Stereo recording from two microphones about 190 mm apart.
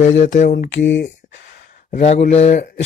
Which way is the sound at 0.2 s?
40° left (ahead or behind).